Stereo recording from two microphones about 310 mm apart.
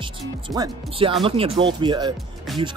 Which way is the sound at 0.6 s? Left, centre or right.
Centre.